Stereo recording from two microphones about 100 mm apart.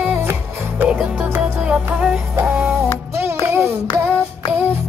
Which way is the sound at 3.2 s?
25° right (ahead or behind).